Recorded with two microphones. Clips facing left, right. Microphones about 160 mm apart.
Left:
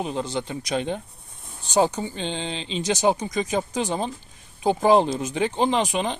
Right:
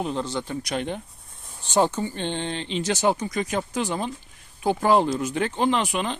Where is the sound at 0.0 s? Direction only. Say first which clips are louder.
Even; 15° left (ahead or behind).